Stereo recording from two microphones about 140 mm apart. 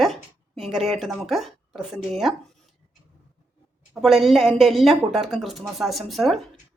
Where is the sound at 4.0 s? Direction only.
Centre (ahead or behind).